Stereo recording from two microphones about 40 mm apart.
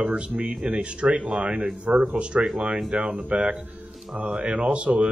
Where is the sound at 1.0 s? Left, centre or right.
Right.